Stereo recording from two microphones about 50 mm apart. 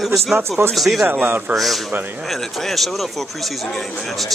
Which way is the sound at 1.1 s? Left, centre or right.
Right.